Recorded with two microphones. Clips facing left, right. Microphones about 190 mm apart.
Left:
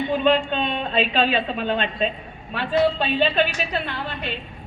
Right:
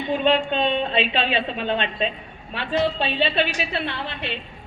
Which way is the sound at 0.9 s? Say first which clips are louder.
Left 2 dB; 45° left (ahead or behind).